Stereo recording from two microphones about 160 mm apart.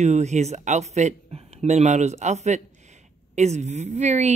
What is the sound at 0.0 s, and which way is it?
Speech, 45° right (ahead or behind).